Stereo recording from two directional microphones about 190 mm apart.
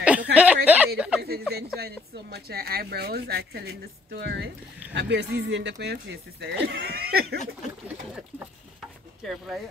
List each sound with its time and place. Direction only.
0.0 s chuckle: 5° right (ahead or behind)
0.7 s a sound: 10° right (ahead or behind)
1.8 s speech: 55° right (ahead or behind)
9.2 s speech: centre (ahead or behind)